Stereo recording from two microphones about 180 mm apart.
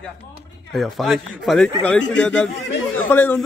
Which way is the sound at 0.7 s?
Centre (ahead or behind).